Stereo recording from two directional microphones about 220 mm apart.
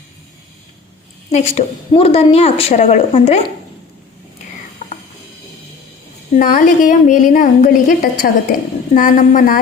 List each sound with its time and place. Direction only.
1.3 s a woman's voice: 30° left (ahead or behind)
6.3 s a woman's voice: 35° left (ahead or behind)